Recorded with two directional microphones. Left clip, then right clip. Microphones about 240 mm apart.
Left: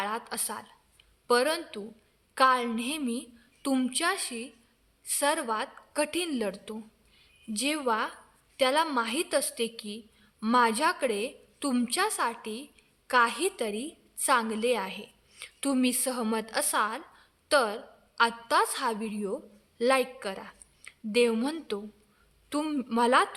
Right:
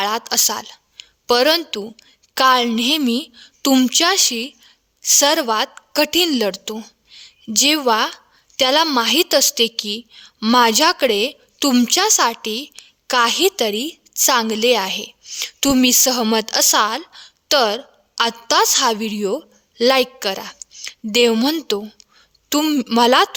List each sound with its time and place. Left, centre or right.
0.0 s a woman's voice: right